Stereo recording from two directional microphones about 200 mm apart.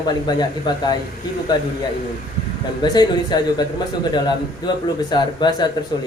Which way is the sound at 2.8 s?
20° left (ahead or behind).